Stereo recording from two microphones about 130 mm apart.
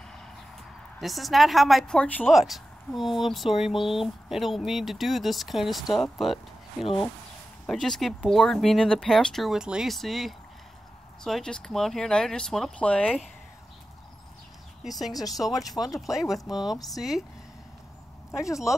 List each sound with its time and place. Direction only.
1.0 s speech: centre (ahead or behind)
2.2 s speech: centre (ahead or behind)
14.8 s speech: centre (ahead or behind)
15.1 s speech: 30° left (ahead or behind)
15.5 s speech: centre (ahead or behind)
18.4 s speech: 25° left (ahead or behind)